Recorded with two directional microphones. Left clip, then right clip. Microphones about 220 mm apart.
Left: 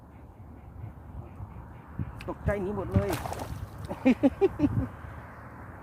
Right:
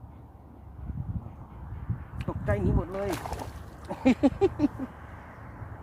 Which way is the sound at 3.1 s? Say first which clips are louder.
Left 1 dB; 20° left (ahead or behind).